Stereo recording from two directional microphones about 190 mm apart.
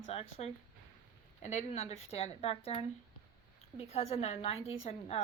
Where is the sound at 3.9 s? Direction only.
30° left (ahead or behind).